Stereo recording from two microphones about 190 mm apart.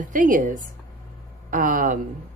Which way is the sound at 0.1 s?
45° right (ahead or behind).